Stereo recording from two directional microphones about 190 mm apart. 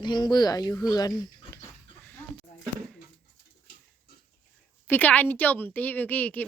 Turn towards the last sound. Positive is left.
turn(degrees=10)  # may be behind; listen again after turning